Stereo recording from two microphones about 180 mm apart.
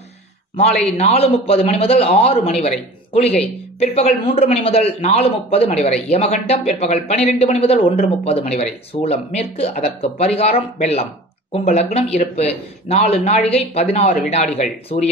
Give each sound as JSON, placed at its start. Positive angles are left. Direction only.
{"t": 0.7, "sound": "a man's voice", "side_deg": 35}